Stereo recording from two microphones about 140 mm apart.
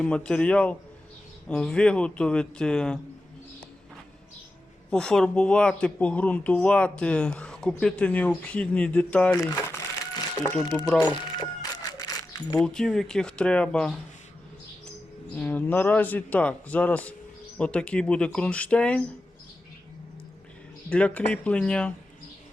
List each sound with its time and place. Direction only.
0.0 s speech: 5° left (ahead or behind)
4.9 s speech: 5° left (ahead or behind)
9.4 s crumpling: 25° left (ahead or behind)
11.0 s a sound: 30° left (ahead or behind)
12.6 s speech: 5° left (ahead or behind)
15.4 s speech: 10° left (ahead or behind)
20.9 s speech: 10° left (ahead or behind)